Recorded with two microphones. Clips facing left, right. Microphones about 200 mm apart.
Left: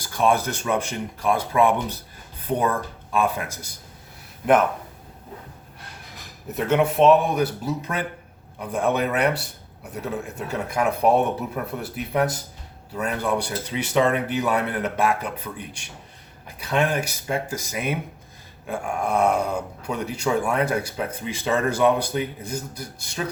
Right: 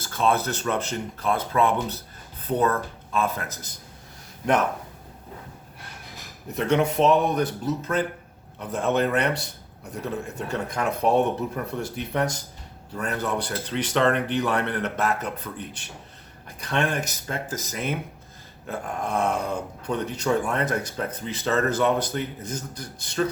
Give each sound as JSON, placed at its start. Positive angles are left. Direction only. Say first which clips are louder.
{"t": 0.0, "sound": "speech", "louder": "left 2 dB", "side_deg": 15}
{"t": 6.5, "sound": "speech", "louder": "left 1 dB", "side_deg": 5}